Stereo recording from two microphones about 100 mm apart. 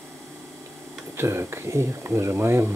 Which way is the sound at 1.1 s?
25° right (ahead or behind).